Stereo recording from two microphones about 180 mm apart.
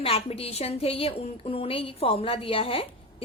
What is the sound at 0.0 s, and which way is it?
A woman's voice, 30° left (ahead or behind).